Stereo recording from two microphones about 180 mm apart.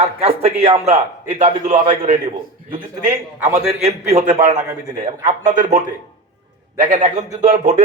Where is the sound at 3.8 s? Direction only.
35° right (ahead or behind).